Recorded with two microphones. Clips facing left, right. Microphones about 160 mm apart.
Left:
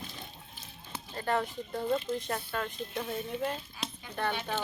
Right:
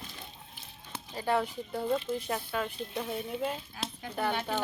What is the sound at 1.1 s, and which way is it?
Speech, 10° right (ahead or behind).